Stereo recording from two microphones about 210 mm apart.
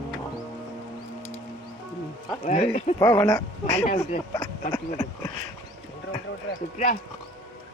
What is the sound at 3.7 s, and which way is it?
Speech, 35° left (ahead or behind).